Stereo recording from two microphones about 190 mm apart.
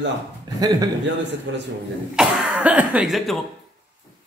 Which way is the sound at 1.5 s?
70° right (ahead or behind).